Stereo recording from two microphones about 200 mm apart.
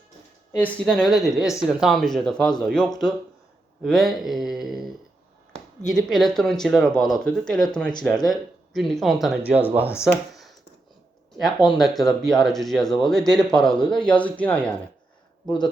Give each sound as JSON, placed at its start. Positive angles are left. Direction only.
{"t": 0.6, "sound": "speech", "side_deg": 0}
{"t": 3.8, "sound": "speech", "side_deg": 0}
{"t": 5.9, "sound": "speech", "side_deg": 0}
{"t": 11.8, "sound": "speech", "side_deg": 0}
{"t": 15.4, "sound": "speech", "side_deg": 20}